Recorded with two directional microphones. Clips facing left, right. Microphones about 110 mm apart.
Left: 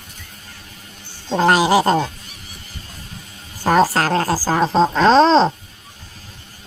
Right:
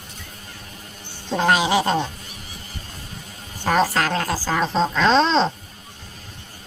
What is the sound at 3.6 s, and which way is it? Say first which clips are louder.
Speech: left 4 dB; 40° left (ahead or behind).